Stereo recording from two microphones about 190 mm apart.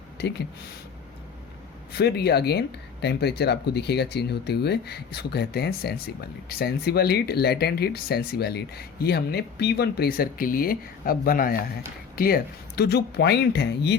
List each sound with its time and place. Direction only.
0.2 s speech: 60° left (ahead or behind)
2.0 s speech: 60° left (ahead or behind)